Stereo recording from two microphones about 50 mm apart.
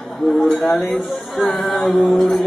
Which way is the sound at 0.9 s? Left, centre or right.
Centre.